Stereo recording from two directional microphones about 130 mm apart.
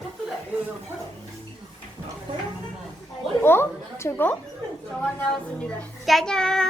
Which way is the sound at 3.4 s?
20° left (ahead or behind).